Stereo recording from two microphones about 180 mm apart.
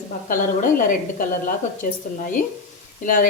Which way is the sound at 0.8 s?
50° left (ahead or behind).